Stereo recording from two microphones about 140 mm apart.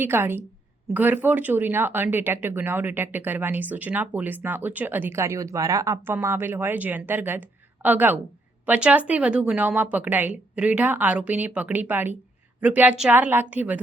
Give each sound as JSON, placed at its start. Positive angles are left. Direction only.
{"t": 0.0, "sound": "speech", "side_deg": -15}